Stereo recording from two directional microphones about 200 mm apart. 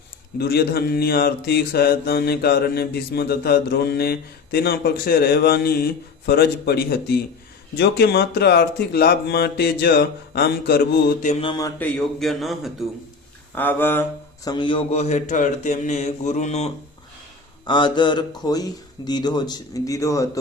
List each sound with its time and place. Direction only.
0.3 s mantra: 55° left (ahead or behind)
11.3 s speech: 30° left (ahead or behind)
11.5 s speech: 15° left (ahead or behind)
11.9 s a man's voice: centre (ahead or behind)
13.6 s mantra: 10° left (ahead or behind)
14.5 s speech: 25° left (ahead or behind)